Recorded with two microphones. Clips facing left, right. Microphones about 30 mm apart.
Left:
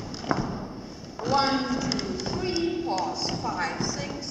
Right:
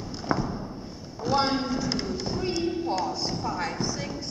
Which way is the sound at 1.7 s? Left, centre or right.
Centre.